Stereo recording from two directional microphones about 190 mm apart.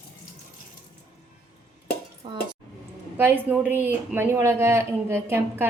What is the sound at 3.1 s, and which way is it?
Speech, 10° right (ahead or behind).